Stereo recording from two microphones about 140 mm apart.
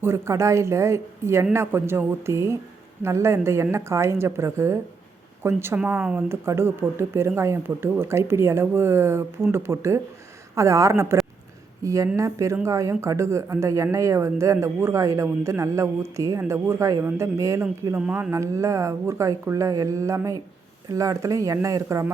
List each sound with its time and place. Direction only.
0.0 s a woman's voice: 20° right (ahead or behind)
17.9 s a woman's voice: 10° right (ahead or behind)